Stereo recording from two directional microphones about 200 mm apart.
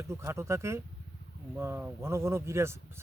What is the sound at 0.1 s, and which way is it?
Speech, 15° right (ahead or behind).